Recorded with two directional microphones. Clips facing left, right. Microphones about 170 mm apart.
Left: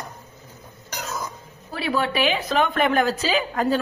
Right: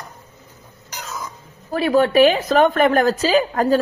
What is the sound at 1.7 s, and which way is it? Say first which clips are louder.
A woman's voice: right 9 dB; 45° right (ahead or behind).